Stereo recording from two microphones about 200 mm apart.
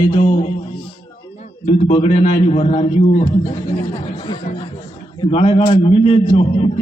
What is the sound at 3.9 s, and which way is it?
A man's voice, 20° left (ahead or behind).